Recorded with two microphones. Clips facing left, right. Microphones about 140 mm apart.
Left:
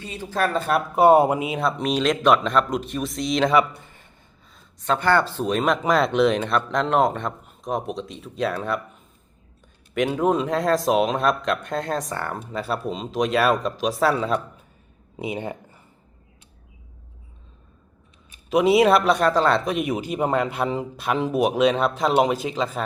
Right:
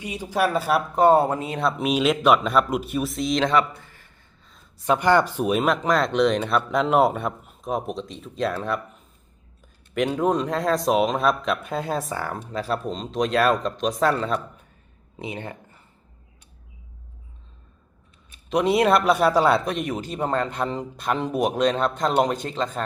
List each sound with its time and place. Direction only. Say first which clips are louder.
0.0 s speech: right 1 dB; 15° right (ahead or behind)
0.9 s speech: left 3 dB; 10° left (ahead or behind)
1.5 s a man's voice: even; centre (ahead or behind)
3.8 s a sound: left 1 dB; 20° left (ahead or behind)
4.8 s a man's voice: right 1 dB; 15° right (ahead or behind); by 14.4 s centre (ahead or behind)
15.2 s speech: left 4 dB; 15° left (ahead or behind)
18.5 s a man's voice: left 2 dB; 5° left (ahead or behind)
19.7 s a man's voice: left 3 dB; 10° left (ahead or behind)